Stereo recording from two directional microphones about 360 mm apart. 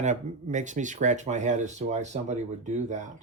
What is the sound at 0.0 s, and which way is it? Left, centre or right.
Speech, centre.